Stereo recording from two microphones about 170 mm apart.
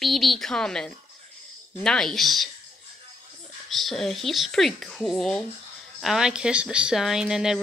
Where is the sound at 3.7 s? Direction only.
Centre (ahead or behind).